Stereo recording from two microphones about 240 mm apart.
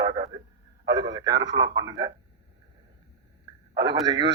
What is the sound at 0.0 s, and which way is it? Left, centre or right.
Radio, centre.